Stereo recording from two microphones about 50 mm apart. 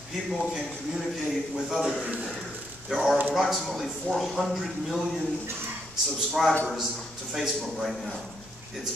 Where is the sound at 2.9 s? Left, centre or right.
Centre.